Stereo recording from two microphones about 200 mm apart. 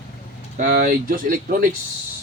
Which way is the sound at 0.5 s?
45° right (ahead or behind).